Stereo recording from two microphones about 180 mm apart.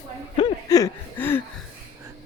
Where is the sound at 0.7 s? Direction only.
15° left (ahead or behind).